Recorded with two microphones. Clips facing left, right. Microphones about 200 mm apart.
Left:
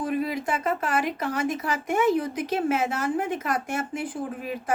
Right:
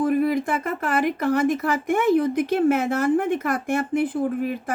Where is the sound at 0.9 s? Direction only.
55° right (ahead or behind).